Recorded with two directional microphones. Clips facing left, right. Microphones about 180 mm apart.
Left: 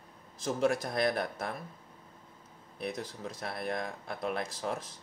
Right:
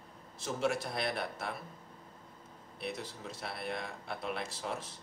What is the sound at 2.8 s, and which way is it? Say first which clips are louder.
Speech: left 3 dB; 45° left (ahead or behind).